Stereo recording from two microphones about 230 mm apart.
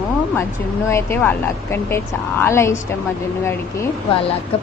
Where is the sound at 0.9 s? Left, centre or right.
Centre.